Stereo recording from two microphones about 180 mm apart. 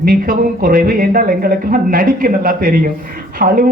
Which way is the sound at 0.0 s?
50° right (ahead or behind).